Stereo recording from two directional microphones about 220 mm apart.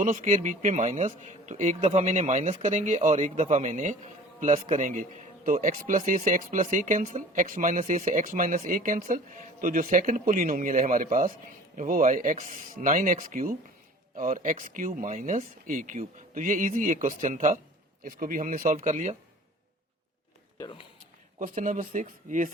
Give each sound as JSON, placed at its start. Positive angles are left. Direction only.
{"t": 0.0, "sound": "a man's voice", "side_deg": -35}
{"t": 20.6, "sound": "speech", "side_deg": 20}
{"t": 21.3, "sound": "speech", "side_deg": -35}